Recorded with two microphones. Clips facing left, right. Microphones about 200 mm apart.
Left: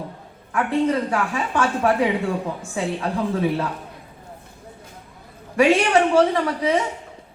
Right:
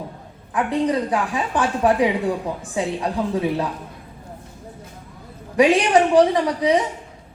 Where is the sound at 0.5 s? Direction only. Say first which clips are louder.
Even; 15° right (ahead or behind).